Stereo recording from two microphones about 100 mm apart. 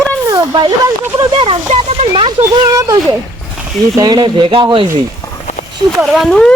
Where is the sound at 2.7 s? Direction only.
35° right (ahead or behind); by 4.9 s 60° right (ahead or behind).